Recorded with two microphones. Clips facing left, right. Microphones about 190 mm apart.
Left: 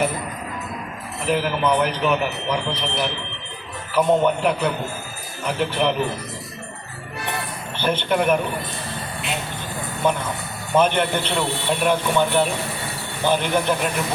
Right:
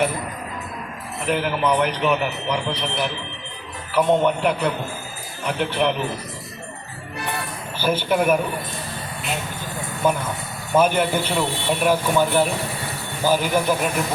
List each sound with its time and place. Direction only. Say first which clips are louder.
1.2 s a man's voice: left 1 dB; centre (ahead or behind)
7.8 s a man's voice: right 1 dB; 5° right (ahead or behind)
10.0 s a man's voice: right 1 dB; 10° right (ahead or behind)